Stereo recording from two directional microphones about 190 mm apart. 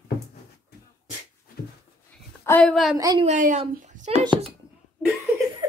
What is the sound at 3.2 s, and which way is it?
Speech, 40° right (ahead or behind).